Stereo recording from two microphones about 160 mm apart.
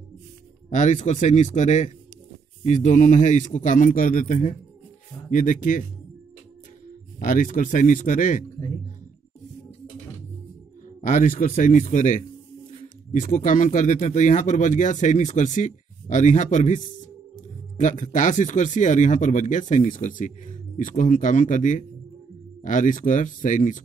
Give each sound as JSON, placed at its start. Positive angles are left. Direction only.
{"t": 0.7, "sound": "speech", "side_deg": 50}
{"t": 7.2, "sound": "speech", "side_deg": 55}
{"t": 11.0, "sound": "speech", "side_deg": 55}
{"t": 13.2, "sound": "speech", "side_deg": 50}